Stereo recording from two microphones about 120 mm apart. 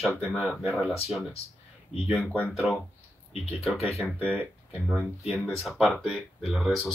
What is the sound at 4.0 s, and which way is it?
Speech, 10° right (ahead or behind).